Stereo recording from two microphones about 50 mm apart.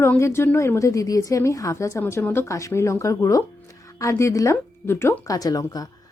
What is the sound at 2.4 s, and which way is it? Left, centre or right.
A woman's voice, left.